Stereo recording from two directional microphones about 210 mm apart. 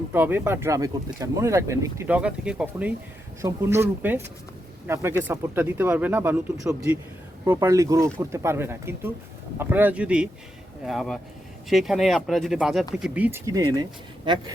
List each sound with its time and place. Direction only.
0.1 s a man's voice: 10° right (ahead or behind)